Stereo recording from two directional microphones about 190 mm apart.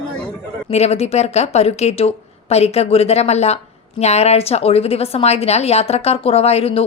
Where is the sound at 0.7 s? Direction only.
35° left (ahead or behind).